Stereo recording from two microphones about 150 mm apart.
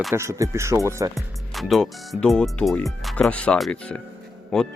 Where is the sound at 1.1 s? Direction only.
Centre (ahead or behind).